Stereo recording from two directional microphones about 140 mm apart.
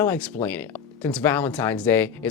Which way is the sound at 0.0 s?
15° left (ahead or behind).